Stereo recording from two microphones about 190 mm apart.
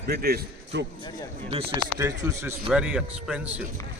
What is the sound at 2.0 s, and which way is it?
Speech, 20° right (ahead or behind).